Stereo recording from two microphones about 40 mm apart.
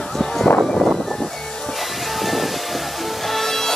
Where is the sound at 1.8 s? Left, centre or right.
Centre.